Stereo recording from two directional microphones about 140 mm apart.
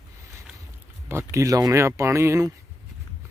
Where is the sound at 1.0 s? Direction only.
20° right (ahead or behind).